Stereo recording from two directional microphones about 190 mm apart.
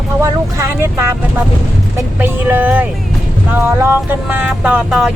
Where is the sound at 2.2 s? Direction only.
10° right (ahead or behind).